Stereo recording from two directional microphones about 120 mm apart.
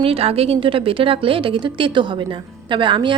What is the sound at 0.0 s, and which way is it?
A woman's voice, 55° right (ahead or behind).